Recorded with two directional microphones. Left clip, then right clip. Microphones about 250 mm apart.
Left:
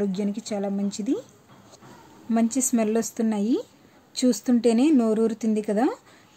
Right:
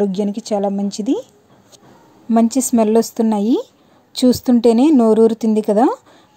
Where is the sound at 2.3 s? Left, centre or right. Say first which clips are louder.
Right 9 dB; right.